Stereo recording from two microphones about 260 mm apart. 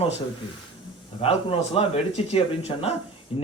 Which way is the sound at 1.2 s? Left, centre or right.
Left.